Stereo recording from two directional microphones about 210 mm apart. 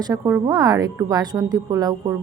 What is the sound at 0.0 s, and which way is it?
A woman's voice, 15° right (ahead or behind).